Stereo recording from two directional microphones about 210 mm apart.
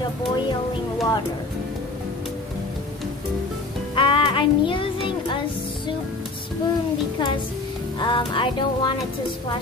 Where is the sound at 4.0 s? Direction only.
25° left (ahead or behind).